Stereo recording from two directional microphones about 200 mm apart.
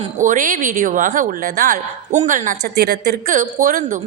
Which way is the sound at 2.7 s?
55° right (ahead or behind).